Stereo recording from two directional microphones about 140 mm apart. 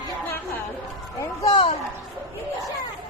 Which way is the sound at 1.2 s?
25° left (ahead or behind).